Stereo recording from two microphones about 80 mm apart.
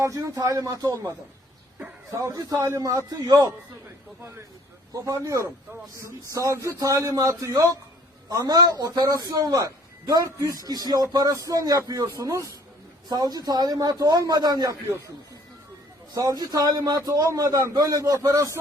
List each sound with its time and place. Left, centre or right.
0.0 s a man's voice: right
4.2 s a man's voice: right
16.1 s a man's voice: right